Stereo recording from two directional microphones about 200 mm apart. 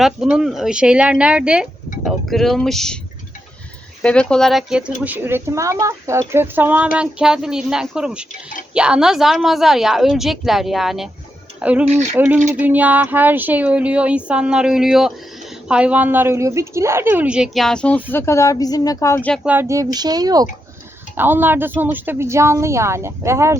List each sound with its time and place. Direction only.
0.0 s a woman's voice: 5° right (ahead or behind)
4.0 s a woman's voice: 5° left (ahead or behind)
11.9 s speech: 35° right (ahead or behind)
12.1 s a woman's voice: 10° right (ahead or behind); by 19.4 s 10° left (ahead or behind)
19.4 s speech: 10° right (ahead or behind)